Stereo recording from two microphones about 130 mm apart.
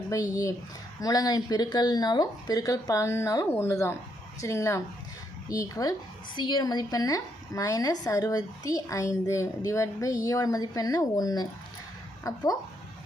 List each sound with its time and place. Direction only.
0.1 s a woman's voice: 25° left (ahead or behind)
6.3 s a woman's voice: 35° left (ahead or behind)